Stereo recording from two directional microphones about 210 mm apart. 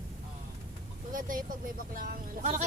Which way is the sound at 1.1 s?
40° right (ahead or behind).